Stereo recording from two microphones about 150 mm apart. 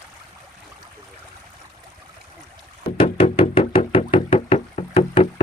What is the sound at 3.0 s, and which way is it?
Knock, 35° left (ahead or behind).